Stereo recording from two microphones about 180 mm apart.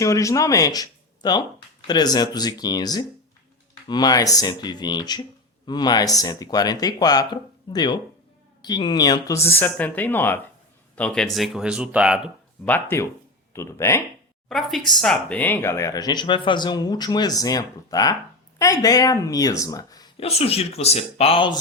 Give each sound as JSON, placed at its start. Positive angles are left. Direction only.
{"t": 0.0, "sound": "speech", "side_deg": 15}
{"t": 12.6, "sound": "speech", "side_deg": 10}
{"t": 14.5, "sound": "speech", "side_deg": 0}
{"t": 20.1, "sound": "speech", "side_deg": 35}